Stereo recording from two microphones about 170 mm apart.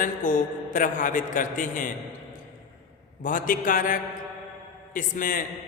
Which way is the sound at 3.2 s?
50° left (ahead or behind).